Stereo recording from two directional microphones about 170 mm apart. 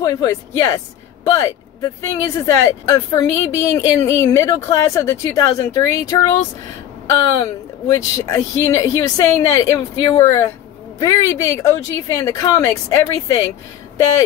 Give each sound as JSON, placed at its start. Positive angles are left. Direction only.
{"t": 0.0, "sound": "speech", "side_deg": 20}
{"t": 7.9, "sound": "speech", "side_deg": 20}